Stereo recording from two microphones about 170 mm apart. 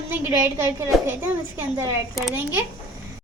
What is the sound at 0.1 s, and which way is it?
Speech, 10° right (ahead or behind).